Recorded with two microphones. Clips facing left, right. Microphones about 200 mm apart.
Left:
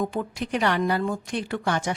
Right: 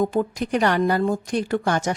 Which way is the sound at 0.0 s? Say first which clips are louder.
Right 6 dB; 40° right (ahead or behind).